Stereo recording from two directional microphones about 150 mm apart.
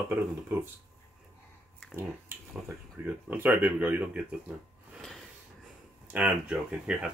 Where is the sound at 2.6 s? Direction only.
10° right (ahead or behind).